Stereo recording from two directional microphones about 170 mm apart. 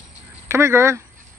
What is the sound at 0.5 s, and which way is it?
Speech, 15° right (ahead or behind).